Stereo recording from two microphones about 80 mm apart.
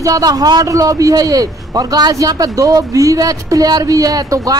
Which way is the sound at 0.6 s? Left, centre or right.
Right.